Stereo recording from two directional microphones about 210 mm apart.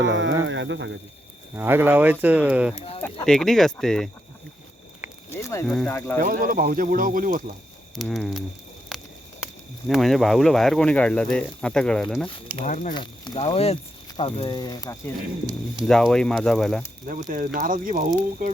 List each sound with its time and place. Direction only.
0.0 s speech: 60° right (ahead or behind)
1.5 s speech: 10° right (ahead or behind)
2.7 s speech: 30° left (ahead or behind)
3.2 s speech: centre (ahead or behind)
5.3 s speech: 15° left (ahead or behind)
6.1 s speech: 45° right (ahead or behind)
7.9 s speech: centre (ahead or behind)
8.9 s a sound: centre (ahead or behind)
9.9 s speech: centre (ahead or behind)
12.6 s speech: 35° left (ahead or behind)
12.9 s speech: 20° left (ahead or behind)
15.9 s speech: 5° left (ahead or behind)
17.1 s speech: 40° right (ahead or behind)